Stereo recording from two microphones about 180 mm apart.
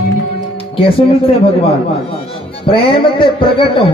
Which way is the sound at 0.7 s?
30° left (ahead or behind).